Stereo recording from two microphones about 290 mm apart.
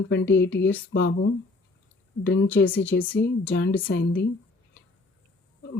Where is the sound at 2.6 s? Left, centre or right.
Centre.